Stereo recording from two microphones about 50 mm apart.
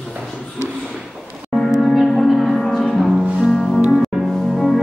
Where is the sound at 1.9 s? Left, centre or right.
Centre.